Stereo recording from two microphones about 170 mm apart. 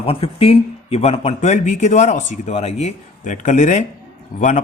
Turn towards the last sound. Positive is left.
turn(degrees=45)  # may be behind; listen again after turning